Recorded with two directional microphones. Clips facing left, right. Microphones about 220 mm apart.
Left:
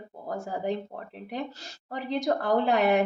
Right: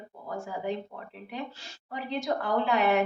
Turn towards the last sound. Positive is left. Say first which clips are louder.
# left 2 dB
turn(degrees=40)  # may be behind; listen again after turning